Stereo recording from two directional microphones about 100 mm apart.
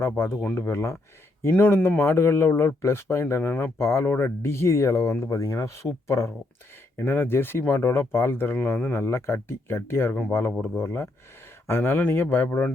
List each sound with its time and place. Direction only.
0.0 s speech: 25° left (ahead or behind)